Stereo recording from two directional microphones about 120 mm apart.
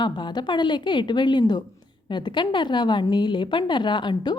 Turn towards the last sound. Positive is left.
turn(degrees=40)  # may be behind; listen again after turning